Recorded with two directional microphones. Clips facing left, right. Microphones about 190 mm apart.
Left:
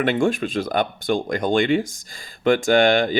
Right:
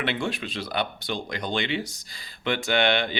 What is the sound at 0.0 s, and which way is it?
Speech, 45° left (ahead or behind).